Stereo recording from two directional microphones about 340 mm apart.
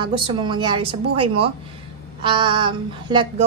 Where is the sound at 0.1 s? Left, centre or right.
Centre.